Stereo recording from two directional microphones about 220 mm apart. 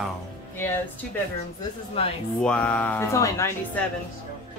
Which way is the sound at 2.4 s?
5° left (ahead or behind).